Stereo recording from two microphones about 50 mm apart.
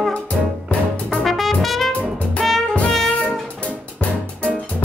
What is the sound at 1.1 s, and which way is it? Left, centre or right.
Music, centre.